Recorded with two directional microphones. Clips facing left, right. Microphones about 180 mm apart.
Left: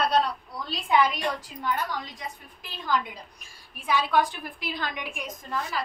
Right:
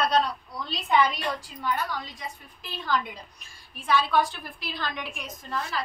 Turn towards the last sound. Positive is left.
turn(degrees=10)  # may be behind; listen again after turning